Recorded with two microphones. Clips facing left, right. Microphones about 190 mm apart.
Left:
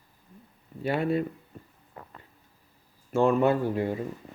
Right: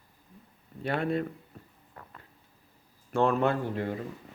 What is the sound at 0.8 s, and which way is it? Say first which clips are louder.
Speech: left 3 dB; 5° left (ahead or behind).